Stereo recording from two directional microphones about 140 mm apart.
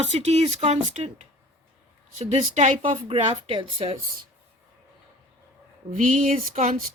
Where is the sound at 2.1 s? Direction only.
55° right (ahead or behind).